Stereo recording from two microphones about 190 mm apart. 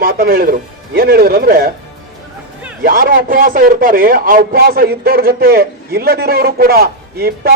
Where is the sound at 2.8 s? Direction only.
50° right (ahead or behind).